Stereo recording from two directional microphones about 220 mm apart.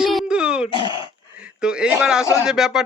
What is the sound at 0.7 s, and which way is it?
Speech, 20° left (ahead or behind).